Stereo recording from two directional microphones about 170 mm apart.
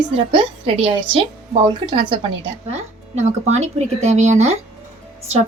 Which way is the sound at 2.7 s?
40° right (ahead or behind).